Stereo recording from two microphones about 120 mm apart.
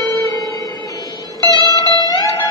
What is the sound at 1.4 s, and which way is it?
Music, 30° right (ahead or behind).